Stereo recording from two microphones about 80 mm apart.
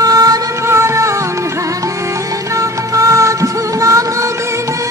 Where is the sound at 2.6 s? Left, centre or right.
Right.